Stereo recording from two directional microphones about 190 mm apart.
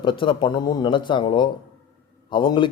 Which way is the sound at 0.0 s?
25° left (ahead or behind).